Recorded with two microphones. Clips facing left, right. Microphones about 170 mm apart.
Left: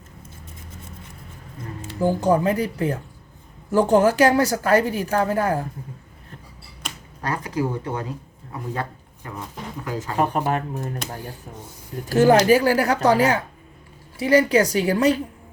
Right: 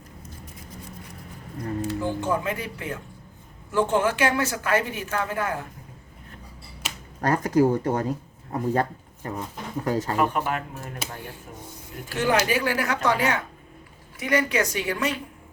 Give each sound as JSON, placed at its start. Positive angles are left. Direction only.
{"t": 1.9, "sound": "speech", "side_deg": 40}
{"t": 7.2, "sound": "speech", "side_deg": -45}
{"t": 10.2, "sound": "speech", "side_deg": 35}
{"t": 12.0, "sound": "speech", "side_deg": 40}